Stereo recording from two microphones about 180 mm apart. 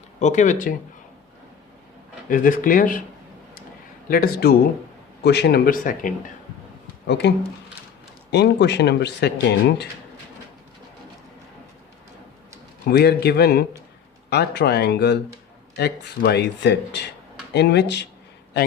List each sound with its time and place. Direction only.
0.2 s speech: 40° left (ahead or behind)
2.3 s speech: 50° left (ahead or behind)
4.1 s speech: 55° left (ahead or behind)
7.1 s speech: 75° left (ahead or behind)
12.8 s speech: 60° left (ahead or behind)